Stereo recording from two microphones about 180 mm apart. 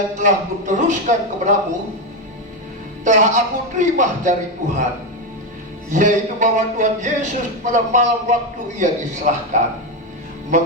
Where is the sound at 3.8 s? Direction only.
40° right (ahead or behind).